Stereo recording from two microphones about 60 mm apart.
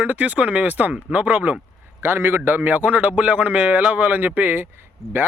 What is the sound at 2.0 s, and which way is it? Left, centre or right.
A man's voice, right.